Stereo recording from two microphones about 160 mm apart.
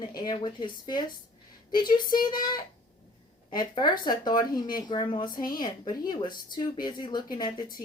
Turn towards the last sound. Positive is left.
turn(degrees=25)  # may be behind; listen again after turning